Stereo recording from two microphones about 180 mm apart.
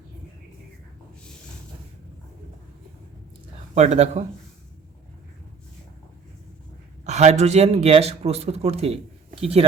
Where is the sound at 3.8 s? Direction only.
40° right (ahead or behind).